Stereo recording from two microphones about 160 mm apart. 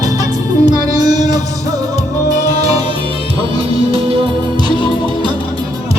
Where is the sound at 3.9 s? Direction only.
35° right (ahead or behind).